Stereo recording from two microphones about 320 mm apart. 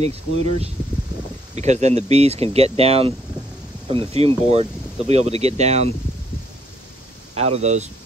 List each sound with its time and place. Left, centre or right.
0.0 s speech: centre
7.3 s speech: centre